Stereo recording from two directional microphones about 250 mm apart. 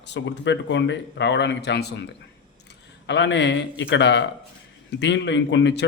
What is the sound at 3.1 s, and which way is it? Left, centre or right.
A man's voice, left.